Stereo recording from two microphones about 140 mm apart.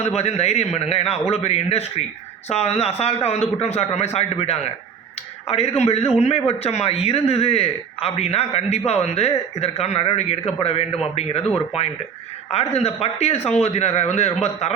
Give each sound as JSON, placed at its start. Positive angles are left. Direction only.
{"t": 0.2, "sound": "speech", "side_deg": 50}
{"t": 12.5, "sound": "speech", "side_deg": 45}